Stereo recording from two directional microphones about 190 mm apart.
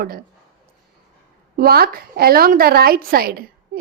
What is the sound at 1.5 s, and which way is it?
A woman's voice, 55° right (ahead or behind).